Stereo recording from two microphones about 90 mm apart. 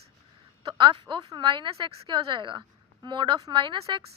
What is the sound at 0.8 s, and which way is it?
Speech, 60° right (ahead or behind).